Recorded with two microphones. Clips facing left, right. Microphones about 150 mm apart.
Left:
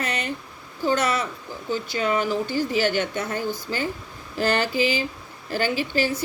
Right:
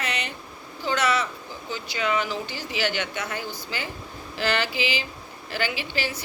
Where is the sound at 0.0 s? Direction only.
45° left (ahead or behind).